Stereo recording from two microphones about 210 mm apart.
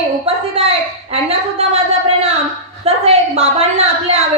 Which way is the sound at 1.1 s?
30° right (ahead or behind).